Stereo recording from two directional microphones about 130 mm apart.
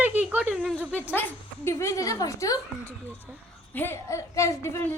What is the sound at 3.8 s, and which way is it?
A woman's voice, 20° left (ahead or behind).